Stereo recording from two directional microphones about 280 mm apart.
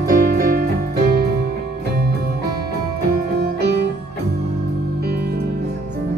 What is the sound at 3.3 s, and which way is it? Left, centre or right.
Music, right.